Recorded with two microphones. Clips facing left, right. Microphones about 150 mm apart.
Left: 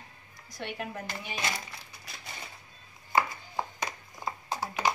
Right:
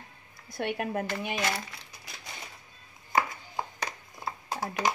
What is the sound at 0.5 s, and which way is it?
Speech, 60° right (ahead or behind).